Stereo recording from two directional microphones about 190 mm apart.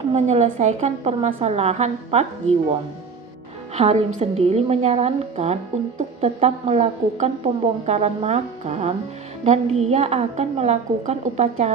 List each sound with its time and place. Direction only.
0.1 s a woman's voice: 35° right (ahead or behind)